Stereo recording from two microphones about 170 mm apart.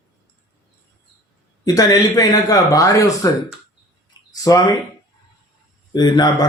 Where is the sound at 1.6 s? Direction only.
20° left (ahead or behind).